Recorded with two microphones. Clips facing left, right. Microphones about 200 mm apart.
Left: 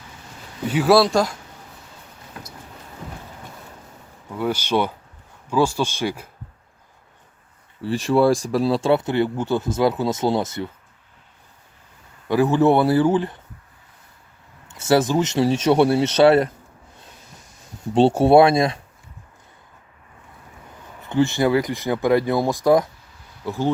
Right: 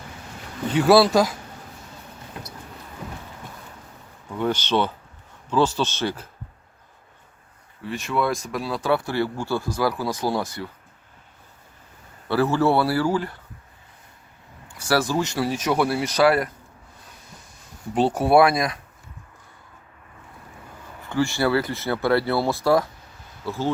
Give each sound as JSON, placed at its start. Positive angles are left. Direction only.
{"t": 0.7, "sound": "speech", "side_deg": 0}
{"t": 4.4, "sound": "speech", "side_deg": 10}
{"t": 7.8, "sound": "speech", "side_deg": 30}
{"t": 12.3, "sound": "speech", "side_deg": 15}
{"t": 14.7, "sound": "speech", "side_deg": 25}
{"t": 17.9, "sound": "speech", "side_deg": 25}
{"t": 21.1, "sound": "speech", "side_deg": 20}